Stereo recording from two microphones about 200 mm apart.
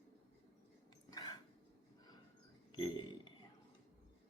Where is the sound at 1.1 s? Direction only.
20° left (ahead or behind).